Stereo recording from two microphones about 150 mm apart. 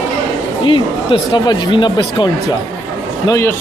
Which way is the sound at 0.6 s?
35° left (ahead or behind).